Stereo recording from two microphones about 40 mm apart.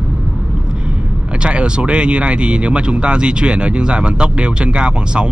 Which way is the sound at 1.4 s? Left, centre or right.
Right.